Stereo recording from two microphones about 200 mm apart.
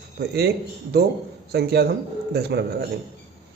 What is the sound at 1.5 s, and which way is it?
A man's voice, 55° right (ahead or behind).